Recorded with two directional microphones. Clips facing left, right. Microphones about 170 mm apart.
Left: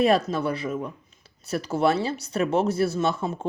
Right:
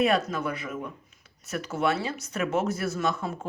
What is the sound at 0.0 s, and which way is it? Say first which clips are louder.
Speech: left 4 dB; 35° left (ahead or behind).